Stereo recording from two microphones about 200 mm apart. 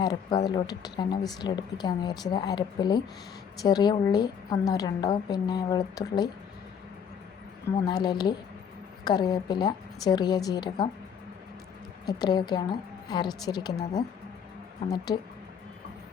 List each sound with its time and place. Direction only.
0.0 s speech: 20° left (ahead or behind)
7.9 s speech: 20° left (ahead or behind)
12.0 s speech: 20° left (ahead or behind)
14.8 s speech: 20° left (ahead or behind)